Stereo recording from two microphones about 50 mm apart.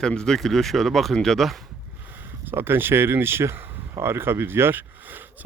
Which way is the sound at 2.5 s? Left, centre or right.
Right.